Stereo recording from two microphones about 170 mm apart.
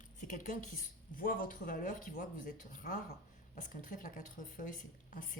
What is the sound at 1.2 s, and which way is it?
A woman's voice, 55° left (ahead or behind).